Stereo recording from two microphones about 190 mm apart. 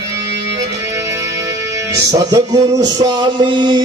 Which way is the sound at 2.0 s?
20° right (ahead or behind).